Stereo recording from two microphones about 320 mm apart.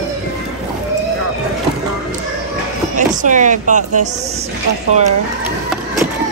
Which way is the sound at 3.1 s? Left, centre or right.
Right.